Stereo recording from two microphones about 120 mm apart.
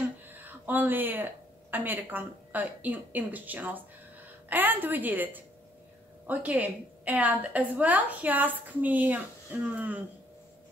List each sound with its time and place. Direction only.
0.4 s a woman's voice: 15° right (ahead or behind)